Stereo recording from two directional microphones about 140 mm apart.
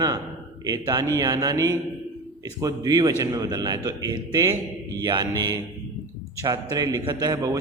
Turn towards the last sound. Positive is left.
turn(degrees=-25)  # may be behind; listen again after turning